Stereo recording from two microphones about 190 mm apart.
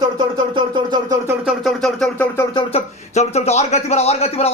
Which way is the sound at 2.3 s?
20° left (ahead or behind).